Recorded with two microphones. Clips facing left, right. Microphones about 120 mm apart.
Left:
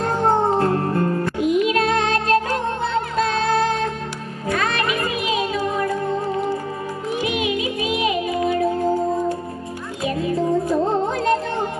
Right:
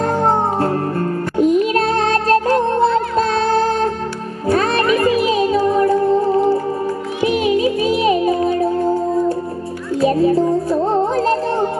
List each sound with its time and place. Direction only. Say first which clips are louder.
0.0 s music: right 2 dB; 35° right (ahead or behind)
10.0 s music: right 7 dB; 35° right (ahead or behind)